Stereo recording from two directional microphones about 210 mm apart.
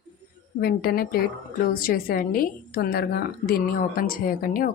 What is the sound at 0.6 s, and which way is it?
A woman's voice, 45° left (ahead or behind).